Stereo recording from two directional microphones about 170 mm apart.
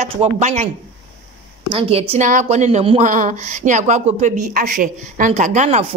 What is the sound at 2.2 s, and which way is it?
Speech, 45° right (ahead or behind).